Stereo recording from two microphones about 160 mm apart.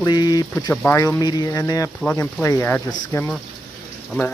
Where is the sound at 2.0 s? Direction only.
10° left (ahead or behind).